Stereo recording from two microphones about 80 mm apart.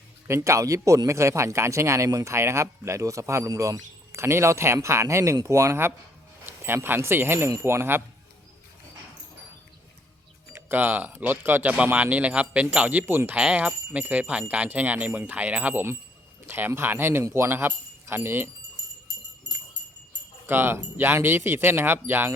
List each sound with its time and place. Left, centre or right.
0.3 s speech: right
10.5 s speech: right
11.7 s speech: centre
20.5 s speech: right